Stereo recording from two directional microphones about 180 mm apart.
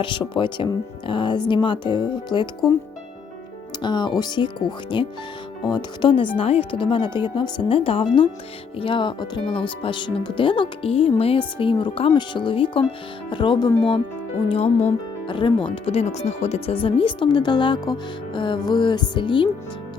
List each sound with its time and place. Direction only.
0.0 s speech: 25° left (ahead or behind)
3.8 s speech: 25° left (ahead or behind)
14.5 s speech: 35° left (ahead or behind)